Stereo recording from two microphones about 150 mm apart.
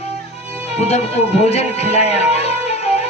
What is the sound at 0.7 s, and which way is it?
A man's voice, 45° left (ahead or behind).